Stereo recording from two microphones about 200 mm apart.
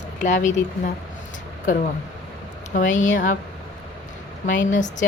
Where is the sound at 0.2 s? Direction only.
35° left (ahead or behind).